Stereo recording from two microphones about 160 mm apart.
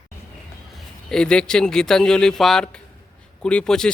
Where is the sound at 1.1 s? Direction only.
5° left (ahead or behind).